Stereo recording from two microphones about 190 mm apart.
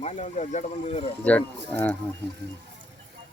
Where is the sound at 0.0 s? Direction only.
40° left (ahead or behind).